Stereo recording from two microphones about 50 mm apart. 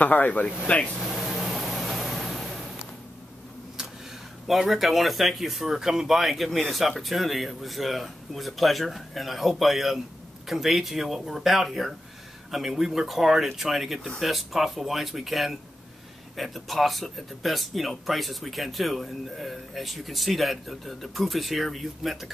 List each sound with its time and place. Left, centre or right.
0.0 s speech: left
1.0 s vehicle: centre
4.5 s speech: centre